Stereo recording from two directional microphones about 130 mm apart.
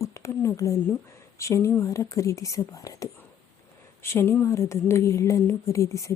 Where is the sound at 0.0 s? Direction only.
25° left (ahead or behind).